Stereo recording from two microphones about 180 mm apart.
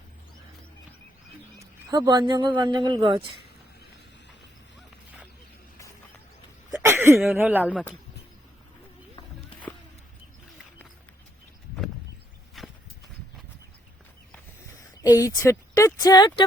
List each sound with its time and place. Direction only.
1.9 s speech: 20° right (ahead or behind)
6.8 s a sound: 15° right (ahead or behind)
7.3 s speech: 10° right (ahead or behind)
7.7 s speech: 5° left (ahead or behind)
12.6 s walk: centre (ahead or behind)
15.0 s speech: 20° left (ahead or behind)